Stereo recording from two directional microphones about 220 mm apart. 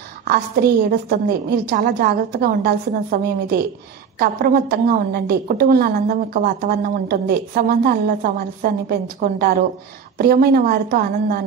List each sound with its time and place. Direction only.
0.3 s a woman's voice: 40° right (ahead or behind)